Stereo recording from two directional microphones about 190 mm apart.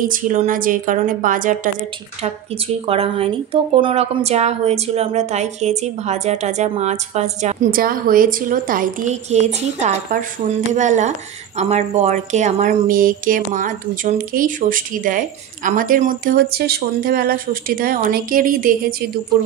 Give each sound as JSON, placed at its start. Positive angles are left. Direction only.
{"t": 0.0, "sound": "a woman's voice", "side_deg": -45}
{"t": 2.9, "sound": "a woman's voice", "side_deg": -30}